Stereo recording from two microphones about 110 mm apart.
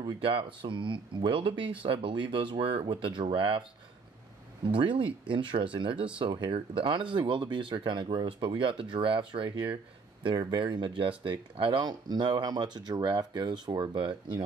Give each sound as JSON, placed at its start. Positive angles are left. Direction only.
{"t": 0.2, "sound": "speech", "side_deg": -55}
{"t": 4.6, "sound": "speech", "side_deg": -50}